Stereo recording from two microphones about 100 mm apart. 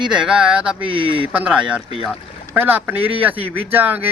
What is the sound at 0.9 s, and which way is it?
Speech, 60° right (ahead or behind).